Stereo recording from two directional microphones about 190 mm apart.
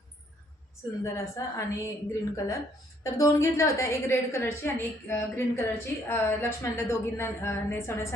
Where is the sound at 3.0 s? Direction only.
15° left (ahead or behind).